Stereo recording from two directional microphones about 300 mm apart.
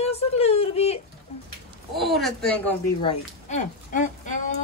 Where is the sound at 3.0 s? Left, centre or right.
Left.